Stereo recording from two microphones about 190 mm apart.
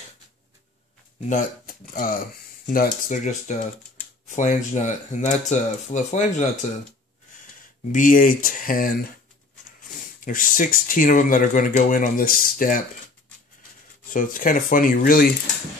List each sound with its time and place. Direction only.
1.3 s speech: 45° left (ahead or behind)
7.9 s speech: 45° left (ahead or behind)
14.1 s speech: 45° left (ahead or behind)